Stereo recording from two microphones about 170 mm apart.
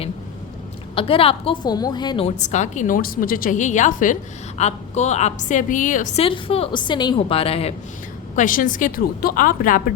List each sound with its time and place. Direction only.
0.9 s a woman's voice: 35° left (ahead or behind)
2.2 s a woman's voice: 45° left (ahead or behind)
6.2 s a woman's voice: 35° left (ahead or behind)
8.4 s a woman's voice: 55° left (ahead or behind)